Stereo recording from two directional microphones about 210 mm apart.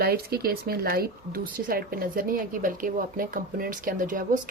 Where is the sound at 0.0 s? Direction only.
50° right (ahead or behind).